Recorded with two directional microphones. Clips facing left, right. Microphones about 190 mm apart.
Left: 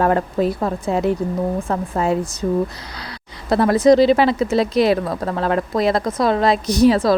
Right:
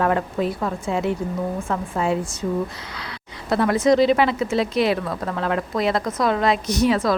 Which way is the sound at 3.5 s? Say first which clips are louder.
Left 4 dB; 35° left (ahead or behind).